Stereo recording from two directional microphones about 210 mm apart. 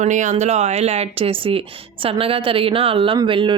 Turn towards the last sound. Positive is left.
turn(degrees=-25)  # may be behind; listen again after turning